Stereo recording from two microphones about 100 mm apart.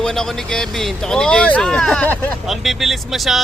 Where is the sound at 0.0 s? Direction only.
5° left (ahead or behind).